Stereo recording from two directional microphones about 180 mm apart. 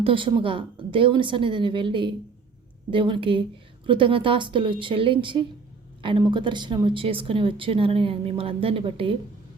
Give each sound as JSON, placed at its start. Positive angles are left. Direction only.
{"t": 0.0, "sound": "speech", "side_deg": -30}